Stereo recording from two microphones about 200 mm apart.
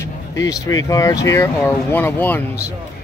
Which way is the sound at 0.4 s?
15° left (ahead or behind).